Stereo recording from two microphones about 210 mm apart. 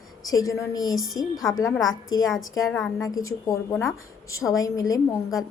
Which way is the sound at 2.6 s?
5° left (ahead or behind).